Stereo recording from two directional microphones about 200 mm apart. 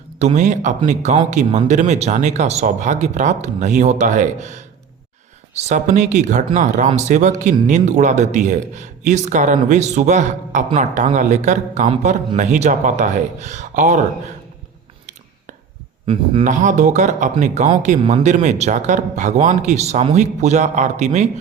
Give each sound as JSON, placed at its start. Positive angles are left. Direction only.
{"t": 0.2, "sound": "speech", "side_deg": -35}
{"t": 16.4, "sound": "speech", "side_deg": -40}